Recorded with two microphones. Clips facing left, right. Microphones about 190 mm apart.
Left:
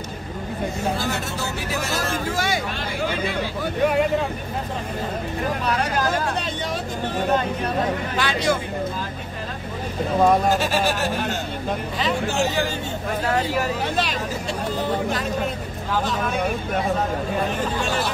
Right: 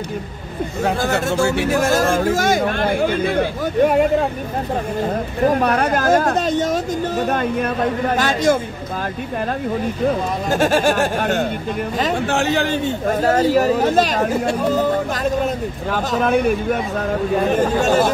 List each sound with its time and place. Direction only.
0.8 s speech: 60° right (ahead or behind)
1.7 s speech: 50° right (ahead or behind)
5.5 s speech: 55° right (ahead or behind)
8.2 s speech: 45° right (ahead or behind)
10.5 s speech: 50° right (ahead or behind)
13.0 s speech: 45° right (ahead or behind)
17.5 s speech: 45° right (ahead or behind)